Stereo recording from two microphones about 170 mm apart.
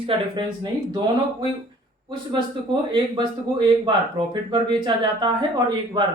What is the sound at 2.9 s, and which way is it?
Speech, 25° right (ahead or behind).